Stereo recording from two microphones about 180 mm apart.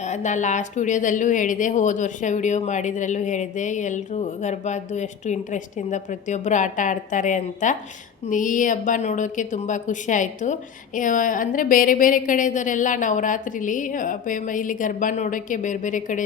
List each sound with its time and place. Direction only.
0.0 s speech: 40° left (ahead or behind)